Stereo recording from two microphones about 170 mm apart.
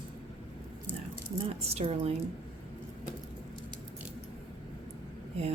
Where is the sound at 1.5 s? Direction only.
35° right (ahead or behind).